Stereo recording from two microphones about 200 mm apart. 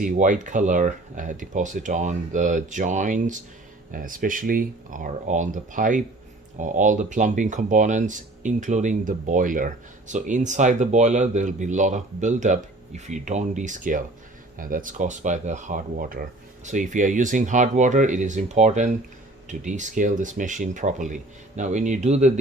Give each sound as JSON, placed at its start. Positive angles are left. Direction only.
{"t": 0.0, "sound": "speech", "side_deg": -40}